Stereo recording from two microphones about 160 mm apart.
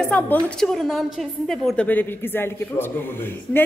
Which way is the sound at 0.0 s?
10° left (ahead or behind).